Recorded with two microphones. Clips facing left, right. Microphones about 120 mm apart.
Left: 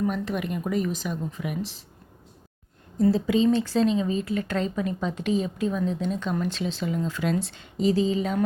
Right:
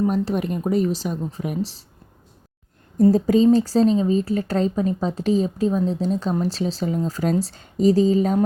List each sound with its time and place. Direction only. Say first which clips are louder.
0.0 s speech: right 6 dB; 35° right (ahead or behind)
3.0 s speech: right 5 dB; 45° right (ahead or behind)